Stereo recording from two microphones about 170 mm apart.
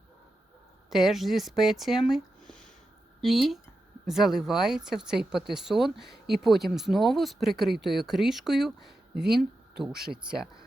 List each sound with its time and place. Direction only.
0.9 s speech: centre (ahead or behind)